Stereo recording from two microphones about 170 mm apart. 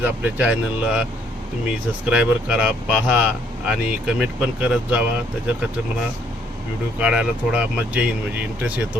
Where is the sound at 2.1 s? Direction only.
5° right (ahead or behind).